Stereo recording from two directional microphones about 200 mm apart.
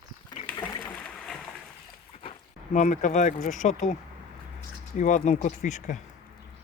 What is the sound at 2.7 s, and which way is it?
Speech, 40° left (ahead or behind).